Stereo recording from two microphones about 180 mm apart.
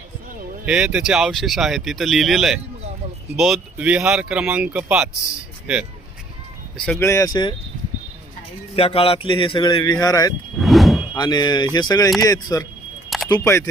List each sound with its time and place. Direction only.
0.6 s speech: 5° right (ahead or behind)
6.7 s speech: 5° left (ahead or behind)
7.0 s speech: 15° left (ahead or behind)
8.7 s a man's voice: 30° left (ahead or behind)
10.6 s a sound: centre (ahead or behind)
11.1 s a man's voice: 25° left (ahead or behind)